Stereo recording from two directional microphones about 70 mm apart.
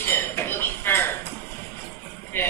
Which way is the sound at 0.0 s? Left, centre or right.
Left.